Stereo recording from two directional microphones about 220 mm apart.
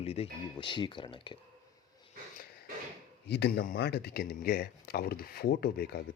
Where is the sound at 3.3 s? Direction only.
50° left (ahead or behind).